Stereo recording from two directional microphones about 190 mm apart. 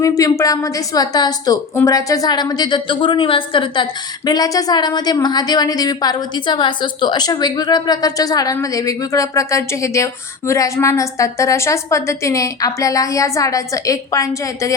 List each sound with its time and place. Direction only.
0.0 s a woman's voice: 15° left (ahead or behind)